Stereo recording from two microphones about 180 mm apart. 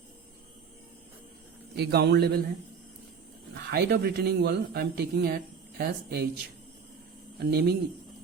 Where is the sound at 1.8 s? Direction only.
65° right (ahead or behind).